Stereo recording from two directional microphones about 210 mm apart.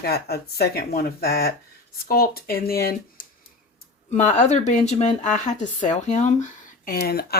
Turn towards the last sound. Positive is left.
turn(degrees=50)  # may be behind; listen again after turning